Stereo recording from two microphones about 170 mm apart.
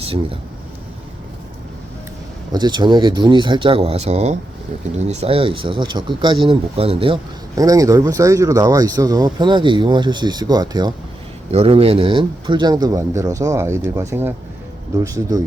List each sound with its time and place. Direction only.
0.0 s speech: 35° right (ahead or behind)
2.5 s speech: 25° right (ahead or behind)
11.5 s speech: 35° right (ahead or behind)